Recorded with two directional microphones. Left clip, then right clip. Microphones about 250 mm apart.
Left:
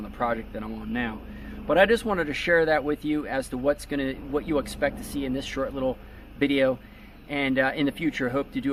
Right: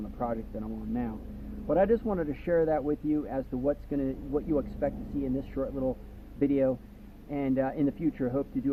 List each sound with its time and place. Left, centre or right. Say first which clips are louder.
0.2 s speech: left 6 dB; centre